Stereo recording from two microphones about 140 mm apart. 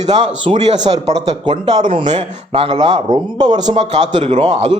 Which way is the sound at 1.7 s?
35° right (ahead or behind).